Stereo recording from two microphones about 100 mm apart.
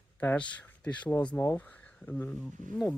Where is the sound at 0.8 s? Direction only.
15° left (ahead or behind).